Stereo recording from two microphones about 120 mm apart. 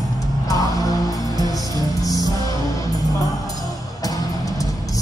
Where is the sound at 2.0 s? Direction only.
30° left (ahead or behind).